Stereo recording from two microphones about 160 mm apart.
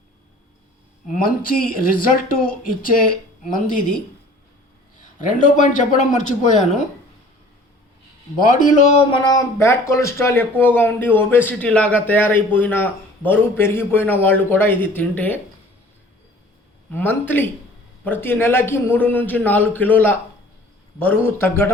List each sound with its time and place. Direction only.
1.0 s speech: 60° left (ahead or behind)
5.5 s speech: 55° left (ahead or behind)
8.4 s speech: 50° left (ahead or behind)
9.0 s a man's voice: 30° left (ahead or behind); by 15.4 s 10° left (ahead or behind)
16.9 s a man's voice: 10° left (ahead or behind)